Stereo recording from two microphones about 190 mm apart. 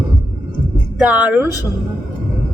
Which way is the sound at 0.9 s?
5° right (ahead or behind).